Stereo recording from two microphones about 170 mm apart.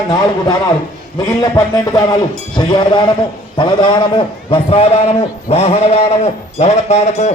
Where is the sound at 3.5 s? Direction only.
25° left (ahead or behind).